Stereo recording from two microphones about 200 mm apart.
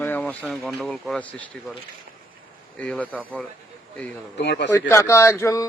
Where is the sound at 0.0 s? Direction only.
10° left (ahead or behind).